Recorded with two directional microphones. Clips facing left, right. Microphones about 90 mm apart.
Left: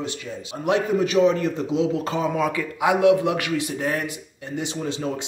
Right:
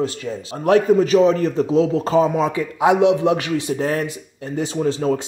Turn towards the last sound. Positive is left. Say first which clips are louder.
# right 7 dB
turn(degrees=-40)  # may be behind; listen again after turning